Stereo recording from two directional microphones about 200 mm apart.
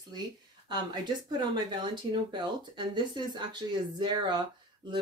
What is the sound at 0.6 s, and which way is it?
Speech, 20° right (ahead or behind).